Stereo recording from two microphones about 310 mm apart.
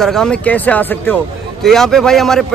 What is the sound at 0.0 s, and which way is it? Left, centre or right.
A man's voice, centre.